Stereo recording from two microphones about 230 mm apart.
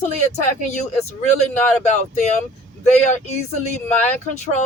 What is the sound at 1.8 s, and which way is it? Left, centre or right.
Speech, left.